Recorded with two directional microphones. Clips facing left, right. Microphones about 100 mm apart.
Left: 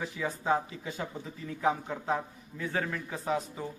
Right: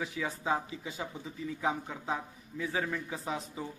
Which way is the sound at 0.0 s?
Centre (ahead or behind).